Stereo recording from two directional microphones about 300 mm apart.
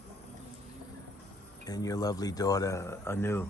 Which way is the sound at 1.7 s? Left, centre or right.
Centre.